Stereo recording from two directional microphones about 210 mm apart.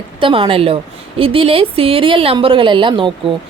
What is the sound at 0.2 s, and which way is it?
Speech, 25° right (ahead or behind).